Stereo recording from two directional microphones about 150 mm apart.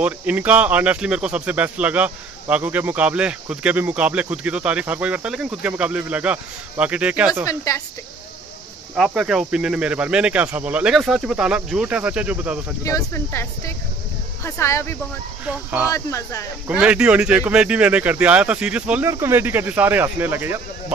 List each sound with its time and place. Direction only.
0.0 s speech: 10° right (ahead or behind)
7.4 s speech: 20° left (ahead or behind)
8.9 s speech: centre (ahead or behind)
12.8 s speech: 20° left (ahead or behind)
15.4 s speech: 10° right (ahead or behind)
15.9 s speech: 20° left (ahead or behind)
16.6 s speech: 5° right (ahead or behind)